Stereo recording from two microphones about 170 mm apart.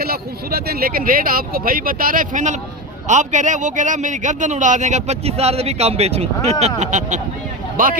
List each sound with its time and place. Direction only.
0.0 s speech: 65° right (ahead or behind)